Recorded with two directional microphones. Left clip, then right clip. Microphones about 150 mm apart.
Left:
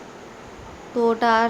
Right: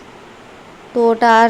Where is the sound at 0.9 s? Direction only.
25° right (ahead or behind).